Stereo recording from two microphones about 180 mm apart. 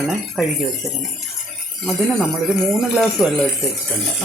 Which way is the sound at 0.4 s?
Centre (ahead or behind).